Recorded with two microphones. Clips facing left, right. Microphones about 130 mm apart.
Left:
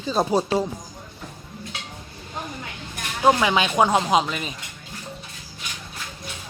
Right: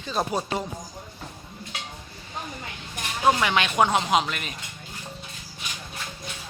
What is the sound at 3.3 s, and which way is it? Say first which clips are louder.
Speech: left 3 dB; 15° left (ahead or behind).